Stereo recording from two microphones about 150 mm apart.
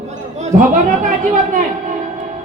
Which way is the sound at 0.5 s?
60° right (ahead or behind).